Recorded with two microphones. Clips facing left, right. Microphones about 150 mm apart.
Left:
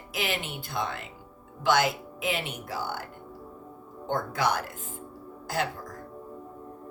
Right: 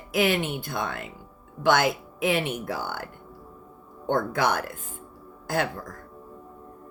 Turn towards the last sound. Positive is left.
turn(degrees=-55)  # may be behind; listen again after turning